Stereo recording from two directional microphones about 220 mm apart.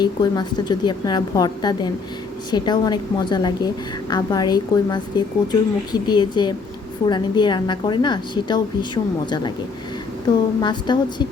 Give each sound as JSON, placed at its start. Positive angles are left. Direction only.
{"t": 0.0, "sound": "a woman's voice", "side_deg": 20}
{"t": 10.2, "sound": "a woman's voice", "side_deg": 20}